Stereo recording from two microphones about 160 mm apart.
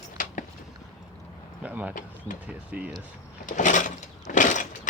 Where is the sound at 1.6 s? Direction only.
10° right (ahead or behind).